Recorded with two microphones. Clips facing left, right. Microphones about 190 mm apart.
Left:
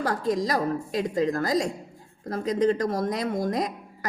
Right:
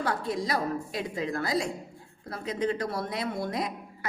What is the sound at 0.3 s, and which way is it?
A woman's voice, 40° left (ahead or behind).